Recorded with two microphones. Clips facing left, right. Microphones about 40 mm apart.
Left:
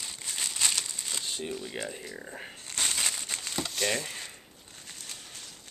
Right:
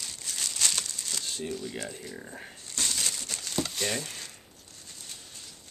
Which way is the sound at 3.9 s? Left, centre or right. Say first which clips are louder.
Left 2 dB; centre.